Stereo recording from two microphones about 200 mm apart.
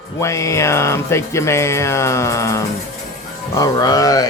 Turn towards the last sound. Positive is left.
turn(degrees=20)  # may be behind; listen again after turning